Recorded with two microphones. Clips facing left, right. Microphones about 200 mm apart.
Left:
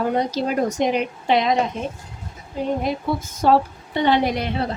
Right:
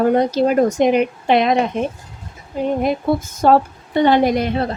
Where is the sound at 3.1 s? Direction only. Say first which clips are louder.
Right 3 dB; 50° right (ahead or behind).